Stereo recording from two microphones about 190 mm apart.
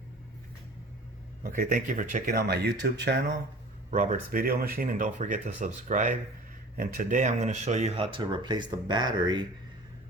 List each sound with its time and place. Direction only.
1.5 s speech: 45° right (ahead or behind); by 3.2 s 60° right (ahead or behind)
3.9 s speech: 40° right (ahead or behind); by 9.5 s 20° right (ahead or behind)